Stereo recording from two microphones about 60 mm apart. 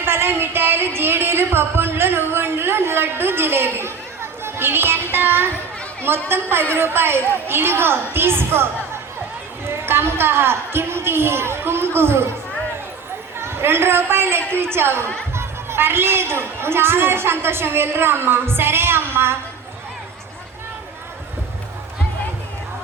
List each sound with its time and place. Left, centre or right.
0.0 s a sound: right
6.1 s a woman's voice: right
13.4 s a woman's voice: right